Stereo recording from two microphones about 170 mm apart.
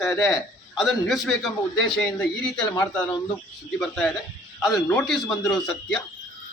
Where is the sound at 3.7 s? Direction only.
5° left (ahead or behind).